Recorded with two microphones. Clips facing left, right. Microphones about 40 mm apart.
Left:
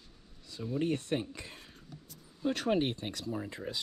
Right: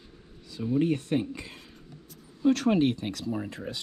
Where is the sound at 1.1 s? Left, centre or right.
Right.